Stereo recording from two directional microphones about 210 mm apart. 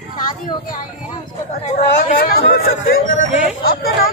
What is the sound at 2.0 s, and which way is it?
Speech, 45° left (ahead or behind).